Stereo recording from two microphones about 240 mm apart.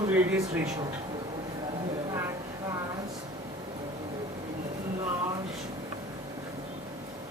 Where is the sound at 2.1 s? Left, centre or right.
Centre.